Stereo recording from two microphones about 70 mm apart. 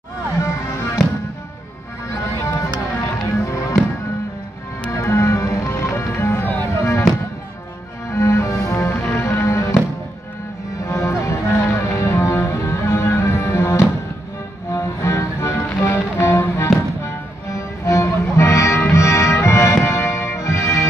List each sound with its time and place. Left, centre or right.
0.4 s music: left
3.3 s music: left
4.9 s music: left
6.8 s music: left
8.1 s music: left
10.9 s music: left